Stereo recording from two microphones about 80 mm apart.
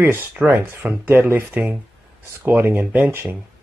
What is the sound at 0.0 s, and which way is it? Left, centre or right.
Speech, right.